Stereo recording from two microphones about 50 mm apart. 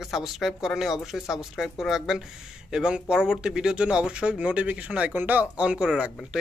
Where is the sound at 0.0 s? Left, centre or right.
Centre; by 5.5 s right.